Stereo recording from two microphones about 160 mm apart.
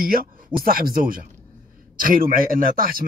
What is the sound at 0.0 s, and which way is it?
A man's voice, 65° right (ahead or behind).